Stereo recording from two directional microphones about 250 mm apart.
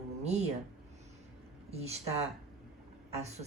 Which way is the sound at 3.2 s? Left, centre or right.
Right.